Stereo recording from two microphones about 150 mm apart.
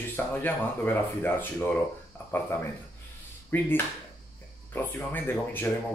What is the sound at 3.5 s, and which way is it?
A man's voice, 15° left (ahead or behind).